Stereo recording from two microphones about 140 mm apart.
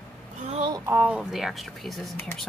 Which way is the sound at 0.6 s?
25° right (ahead or behind).